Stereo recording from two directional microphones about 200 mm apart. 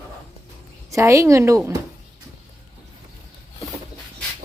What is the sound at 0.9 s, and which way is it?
Speech, 15° right (ahead or behind).